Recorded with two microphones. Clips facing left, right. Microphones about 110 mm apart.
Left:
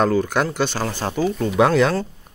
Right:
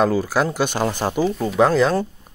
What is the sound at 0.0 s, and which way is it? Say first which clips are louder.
Speech: even; 5° right (ahead or behind).